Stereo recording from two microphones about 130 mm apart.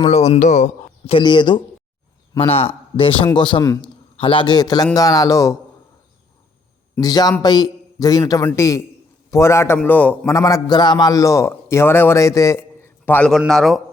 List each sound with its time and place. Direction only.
0.0 s speech: 55° left (ahead or behind)
0.3 s a man's voice: 70° left (ahead or behind)
1.1 s a man's voice: 35° left (ahead or behind)
2.9 s a man's voice: 45° left (ahead or behind)
3.6 s a man's voice: 25° left (ahead or behind)
4.2 s a man's voice: 40° left (ahead or behind); by 5.5 s 25° left (ahead or behind)
7.0 s a man's voice: 30° left (ahead or behind); by 10.3 s 10° left (ahead or behind)
10.3 s a man's voice: 30° left (ahead or behind)
13.5 s a man's voice: centre (ahead or behind)